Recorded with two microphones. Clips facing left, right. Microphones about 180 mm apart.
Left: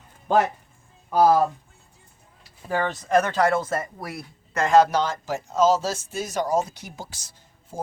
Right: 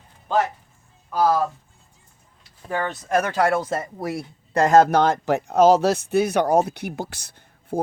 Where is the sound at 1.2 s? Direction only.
20° left (ahead or behind).